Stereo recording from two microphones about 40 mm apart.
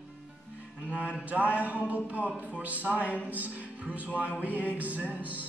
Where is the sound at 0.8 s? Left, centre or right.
Right.